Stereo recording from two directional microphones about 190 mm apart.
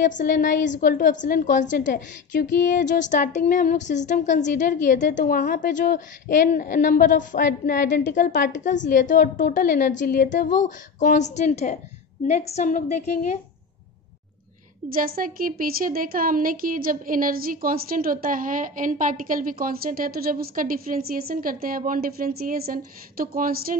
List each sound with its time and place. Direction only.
0.0 s a woman's voice: 45° left (ahead or behind)
14.9 s speech: 50° right (ahead or behind)